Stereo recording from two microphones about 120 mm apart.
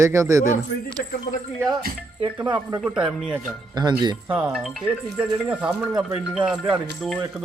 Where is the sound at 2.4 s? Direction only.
35° right (ahead or behind).